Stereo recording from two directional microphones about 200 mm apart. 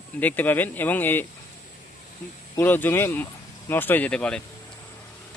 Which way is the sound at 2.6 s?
10° left (ahead or behind).